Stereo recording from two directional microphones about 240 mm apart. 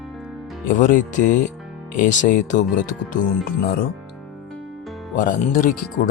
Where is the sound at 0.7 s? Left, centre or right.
Left.